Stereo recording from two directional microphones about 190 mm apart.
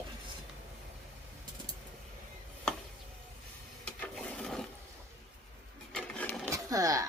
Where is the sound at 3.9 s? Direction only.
5° left (ahead or behind).